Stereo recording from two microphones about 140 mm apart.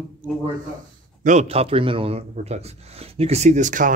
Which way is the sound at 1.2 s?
50° right (ahead or behind).